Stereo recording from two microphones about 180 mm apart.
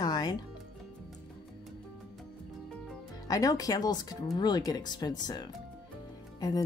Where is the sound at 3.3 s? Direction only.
20° left (ahead or behind).